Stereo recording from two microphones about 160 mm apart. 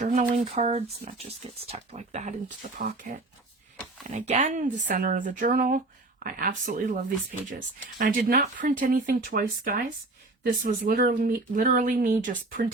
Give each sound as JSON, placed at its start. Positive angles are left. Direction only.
{"t": 0.0, "sound": "speech", "side_deg": -50}